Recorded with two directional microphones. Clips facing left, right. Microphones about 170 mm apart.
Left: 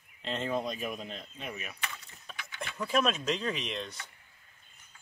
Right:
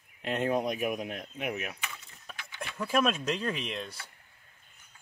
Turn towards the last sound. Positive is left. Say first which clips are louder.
# even
turn(degrees=-10)  # may be behind; listen again after turning